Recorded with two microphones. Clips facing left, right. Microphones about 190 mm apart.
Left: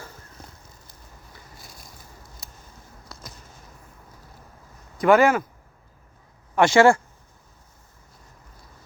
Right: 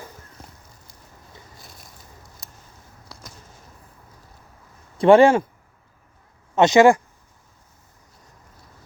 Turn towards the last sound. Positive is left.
turn(degrees=-15)  # may be behind; listen again after turning